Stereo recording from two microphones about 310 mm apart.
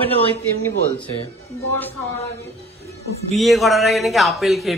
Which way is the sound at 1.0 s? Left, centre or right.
Centre.